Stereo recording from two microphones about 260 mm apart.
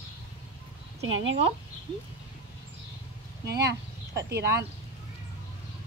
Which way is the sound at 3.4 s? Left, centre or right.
Right.